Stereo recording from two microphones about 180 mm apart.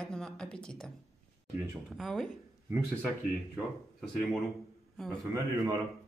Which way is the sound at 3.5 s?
Centre (ahead or behind).